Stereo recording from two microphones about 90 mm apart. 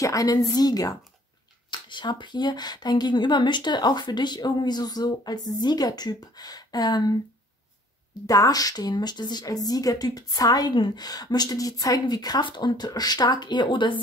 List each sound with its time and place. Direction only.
0.0 s speech: 40° left (ahead or behind)
1.7 s speech: 60° left (ahead or behind)
8.3 s speech: 40° left (ahead or behind)
10.7 s speech: 55° left (ahead or behind)